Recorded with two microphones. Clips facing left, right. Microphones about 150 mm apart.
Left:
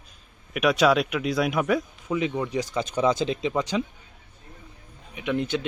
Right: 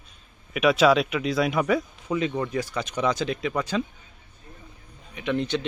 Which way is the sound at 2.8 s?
30° left (ahead or behind).